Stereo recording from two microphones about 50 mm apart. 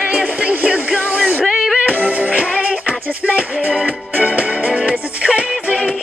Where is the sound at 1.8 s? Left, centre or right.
Right.